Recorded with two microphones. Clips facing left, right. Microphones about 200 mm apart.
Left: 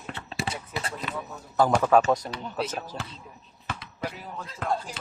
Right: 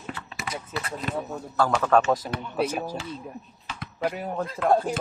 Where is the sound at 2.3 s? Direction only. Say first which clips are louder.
Right 4 dB; 5° right (ahead or behind).